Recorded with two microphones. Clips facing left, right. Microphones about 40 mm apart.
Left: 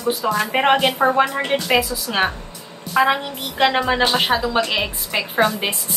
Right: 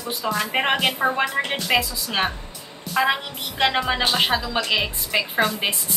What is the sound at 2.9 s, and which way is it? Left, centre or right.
A woman's voice, centre.